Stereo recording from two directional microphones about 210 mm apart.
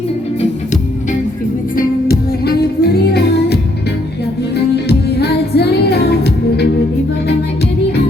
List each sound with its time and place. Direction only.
0.3 s music: 35° left (ahead or behind)
1.7 s music: 45° left (ahead or behind)
4.9 s music: 50° left (ahead or behind)